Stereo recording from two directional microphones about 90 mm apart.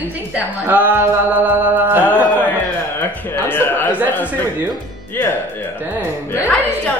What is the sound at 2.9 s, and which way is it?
Speech, 25° left (ahead or behind).